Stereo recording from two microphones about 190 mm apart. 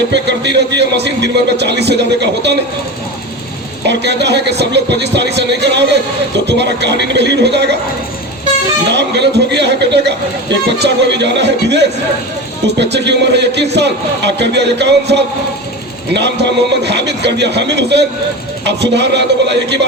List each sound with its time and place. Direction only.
0.1 s speech: 65° right (ahead or behind)
3.8 s speech: 65° right (ahead or behind)
8.9 s speech: 65° right (ahead or behind)
12.6 s speech: 65° right (ahead or behind)